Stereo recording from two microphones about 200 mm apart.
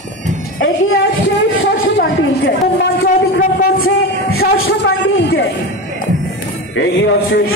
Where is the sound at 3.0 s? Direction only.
45° left (ahead or behind).